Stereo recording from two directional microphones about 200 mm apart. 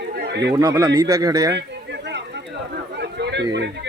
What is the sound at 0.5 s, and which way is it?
Speech, 15° right (ahead or behind).